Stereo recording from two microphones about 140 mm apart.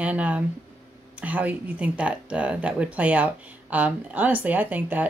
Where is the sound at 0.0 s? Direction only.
10° right (ahead or behind).